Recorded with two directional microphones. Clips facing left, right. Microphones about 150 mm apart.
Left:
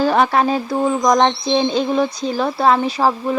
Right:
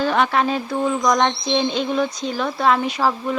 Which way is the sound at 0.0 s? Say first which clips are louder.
Left 3 dB; 35° left (ahead or behind).